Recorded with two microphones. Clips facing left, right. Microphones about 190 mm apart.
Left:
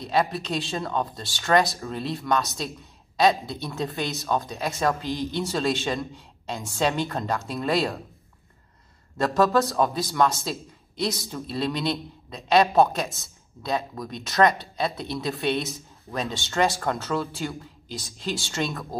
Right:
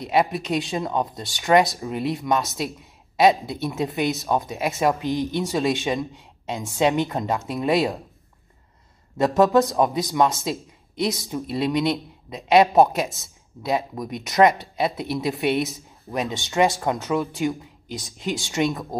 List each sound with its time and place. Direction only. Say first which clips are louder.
0.0 s speech: right 3 dB; 20° right (ahead or behind)
9.2 s speech: right 4 dB; 20° right (ahead or behind)